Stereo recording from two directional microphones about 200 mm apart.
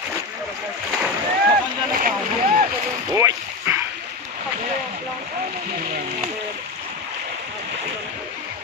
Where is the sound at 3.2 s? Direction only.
15° right (ahead or behind).